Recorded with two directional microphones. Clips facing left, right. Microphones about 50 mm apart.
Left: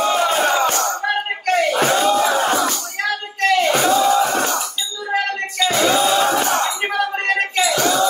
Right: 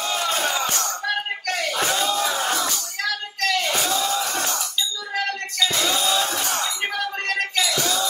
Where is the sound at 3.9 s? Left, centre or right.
Left.